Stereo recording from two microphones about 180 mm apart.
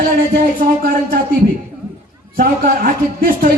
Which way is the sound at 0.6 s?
50° right (ahead or behind).